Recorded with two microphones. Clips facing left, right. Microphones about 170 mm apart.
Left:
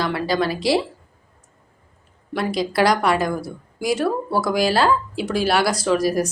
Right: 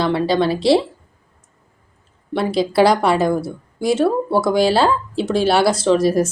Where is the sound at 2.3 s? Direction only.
30° right (ahead or behind).